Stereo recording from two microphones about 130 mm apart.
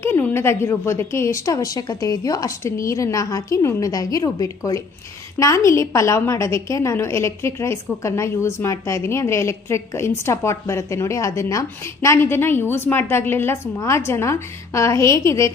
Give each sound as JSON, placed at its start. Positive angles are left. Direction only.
{"t": 0.0, "sound": "a woman's voice", "side_deg": 15}